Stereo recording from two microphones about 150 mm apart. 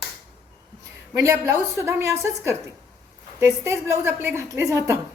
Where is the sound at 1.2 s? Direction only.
20° right (ahead or behind).